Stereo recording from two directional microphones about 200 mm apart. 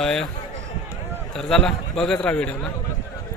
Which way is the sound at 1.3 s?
5° left (ahead or behind).